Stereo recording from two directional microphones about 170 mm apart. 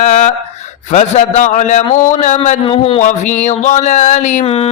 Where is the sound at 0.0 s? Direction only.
40° left (ahead or behind).